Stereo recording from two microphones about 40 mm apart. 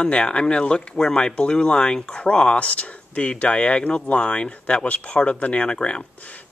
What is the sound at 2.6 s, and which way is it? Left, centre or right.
Speech, left.